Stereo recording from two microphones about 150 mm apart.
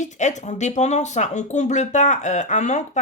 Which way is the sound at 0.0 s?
55° left (ahead or behind).